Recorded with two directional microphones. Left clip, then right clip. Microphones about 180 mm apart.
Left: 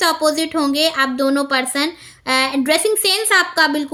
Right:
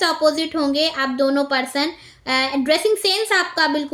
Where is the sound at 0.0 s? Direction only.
40° left (ahead or behind).